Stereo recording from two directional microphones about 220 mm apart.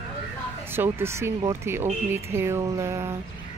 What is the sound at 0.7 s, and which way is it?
Speech, 10° right (ahead or behind).